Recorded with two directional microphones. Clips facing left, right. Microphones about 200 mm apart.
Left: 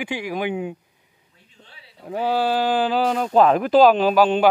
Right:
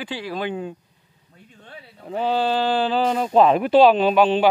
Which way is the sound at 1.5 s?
55° right (ahead or behind).